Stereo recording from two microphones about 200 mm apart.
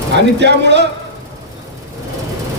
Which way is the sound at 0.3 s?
60° right (ahead or behind).